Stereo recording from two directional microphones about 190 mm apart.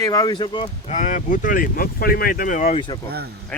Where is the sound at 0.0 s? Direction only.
20° left (ahead or behind).